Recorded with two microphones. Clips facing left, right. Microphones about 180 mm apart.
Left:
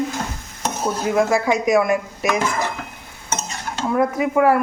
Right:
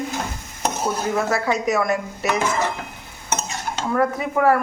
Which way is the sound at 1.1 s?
10° left (ahead or behind).